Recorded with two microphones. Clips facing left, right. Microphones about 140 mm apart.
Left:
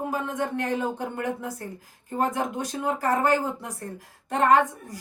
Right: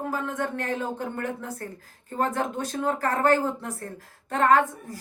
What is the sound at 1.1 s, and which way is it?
Speech, 15° left (ahead or behind).